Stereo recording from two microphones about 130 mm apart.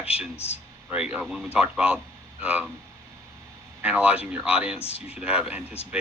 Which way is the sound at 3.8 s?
10° right (ahead or behind).